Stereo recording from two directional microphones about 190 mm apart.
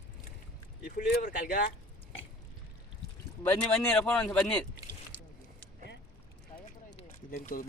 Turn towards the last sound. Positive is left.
turn(degrees=45)  # may be behind; listen again after turning